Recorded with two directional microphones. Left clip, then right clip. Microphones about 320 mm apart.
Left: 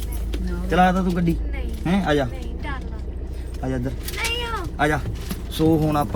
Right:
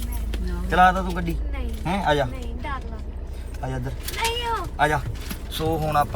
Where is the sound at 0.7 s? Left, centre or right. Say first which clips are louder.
Right 1 dB; left.